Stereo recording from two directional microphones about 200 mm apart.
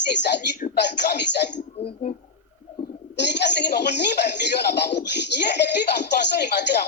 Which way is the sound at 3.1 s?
60° left (ahead or behind).